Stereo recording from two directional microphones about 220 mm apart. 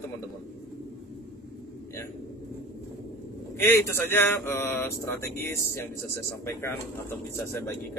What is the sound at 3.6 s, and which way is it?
Speech, 10° left (ahead or behind).